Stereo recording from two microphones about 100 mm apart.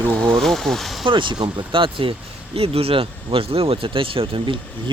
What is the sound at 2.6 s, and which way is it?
Speech, 75° right (ahead or behind).